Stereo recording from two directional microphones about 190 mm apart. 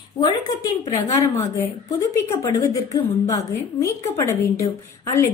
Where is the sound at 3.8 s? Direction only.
15° left (ahead or behind).